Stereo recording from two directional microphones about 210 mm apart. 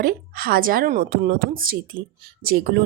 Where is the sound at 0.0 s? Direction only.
45° right (ahead or behind).